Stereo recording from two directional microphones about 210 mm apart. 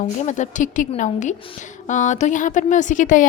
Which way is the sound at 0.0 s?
35° left (ahead or behind).